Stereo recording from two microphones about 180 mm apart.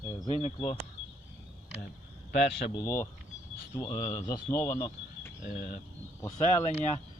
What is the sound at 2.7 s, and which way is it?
Speech, 15° left (ahead or behind).